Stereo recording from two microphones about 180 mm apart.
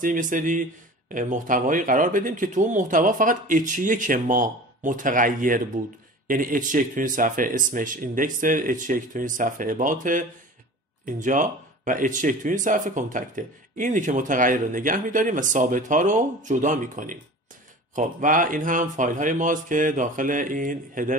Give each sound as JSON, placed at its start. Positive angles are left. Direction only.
{"t": 0.0, "sound": "speech", "side_deg": -45}